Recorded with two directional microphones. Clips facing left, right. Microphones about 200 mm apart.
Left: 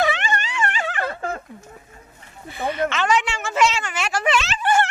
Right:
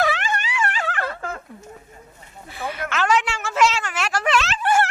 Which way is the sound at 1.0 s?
25° left (ahead or behind).